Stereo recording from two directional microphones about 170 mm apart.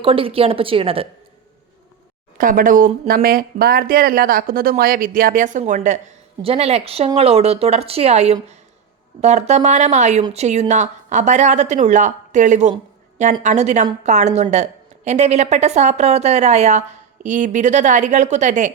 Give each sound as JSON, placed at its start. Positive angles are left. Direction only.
{"t": 0.0, "sound": "a woman's voice", "side_deg": -30}
{"t": 2.4, "sound": "a woman's voice", "side_deg": -55}